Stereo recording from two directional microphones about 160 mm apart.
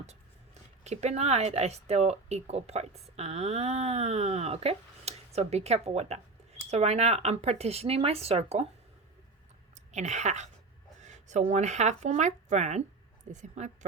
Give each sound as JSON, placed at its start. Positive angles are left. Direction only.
{"t": 0.0, "sound": "speech", "side_deg": -45}
{"t": 9.7, "sound": "a woman's voice", "side_deg": -45}